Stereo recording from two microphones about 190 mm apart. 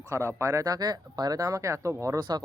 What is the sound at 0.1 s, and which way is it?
Speech, 15° right (ahead or behind).